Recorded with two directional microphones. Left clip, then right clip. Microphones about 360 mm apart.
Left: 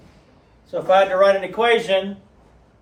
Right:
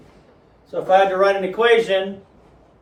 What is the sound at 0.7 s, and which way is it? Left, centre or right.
A man's voice, left.